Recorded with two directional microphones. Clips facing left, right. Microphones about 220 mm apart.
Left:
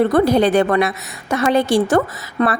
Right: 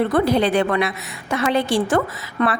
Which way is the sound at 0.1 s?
45° left (ahead or behind).